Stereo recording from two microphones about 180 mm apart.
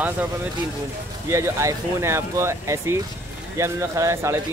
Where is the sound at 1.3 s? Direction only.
15° right (ahead or behind).